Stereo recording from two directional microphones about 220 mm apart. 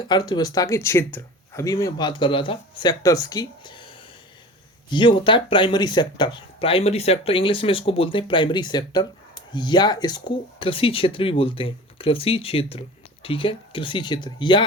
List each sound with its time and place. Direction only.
0.0 s speech: 20° left (ahead or behind)